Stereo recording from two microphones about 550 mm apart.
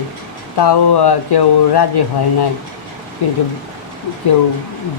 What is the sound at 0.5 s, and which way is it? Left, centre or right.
Speech, left.